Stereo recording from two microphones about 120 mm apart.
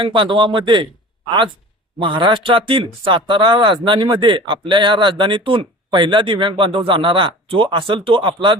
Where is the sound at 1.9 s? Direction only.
45° right (ahead or behind).